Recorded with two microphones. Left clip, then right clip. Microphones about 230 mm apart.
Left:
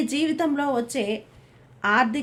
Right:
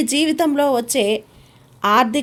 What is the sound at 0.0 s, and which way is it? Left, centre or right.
A woman's voice, right.